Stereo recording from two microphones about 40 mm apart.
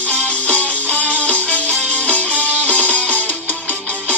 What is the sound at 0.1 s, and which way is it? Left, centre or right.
Music, left.